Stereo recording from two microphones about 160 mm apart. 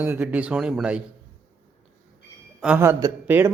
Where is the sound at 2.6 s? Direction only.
10° right (ahead or behind).